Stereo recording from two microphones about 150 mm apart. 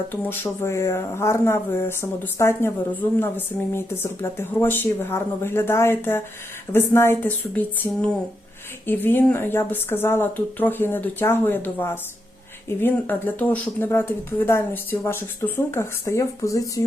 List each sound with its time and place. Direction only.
0.1 s speech: 15° left (ahead or behind)